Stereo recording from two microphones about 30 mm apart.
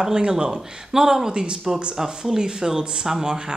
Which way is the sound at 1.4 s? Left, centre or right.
Right.